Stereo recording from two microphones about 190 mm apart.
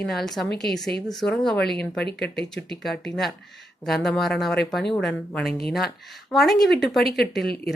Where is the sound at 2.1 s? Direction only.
60° left (ahead or behind).